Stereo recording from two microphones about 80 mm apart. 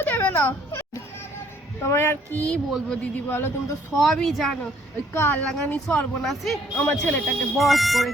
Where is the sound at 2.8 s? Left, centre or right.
Centre.